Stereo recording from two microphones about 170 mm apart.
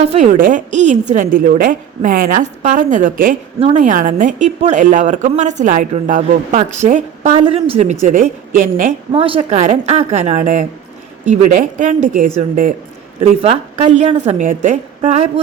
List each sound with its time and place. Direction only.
0.0 s a woman's voice: 40° right (ahead or behind)
8.0 s a woman's voice: 50° right (ahead or behind)
9.1 s a woman's voice: 30° right (ahead or behind)
9.6 s a woman's voice: 45° right (ahead or behind)
13.4 s a woman's voice: 35° right (ahead or behind)